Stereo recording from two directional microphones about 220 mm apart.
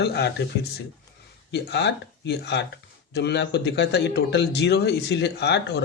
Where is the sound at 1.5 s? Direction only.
50° left (ahead or behind).